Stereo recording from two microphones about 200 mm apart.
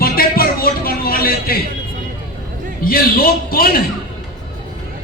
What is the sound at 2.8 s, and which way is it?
Music, 45° left (ahead or behind).